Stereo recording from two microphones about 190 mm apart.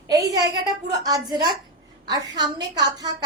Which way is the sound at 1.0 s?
20° right (ahead or behind).